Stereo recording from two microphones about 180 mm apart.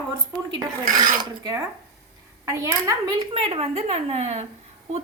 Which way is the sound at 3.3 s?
30° right (ahead or behind).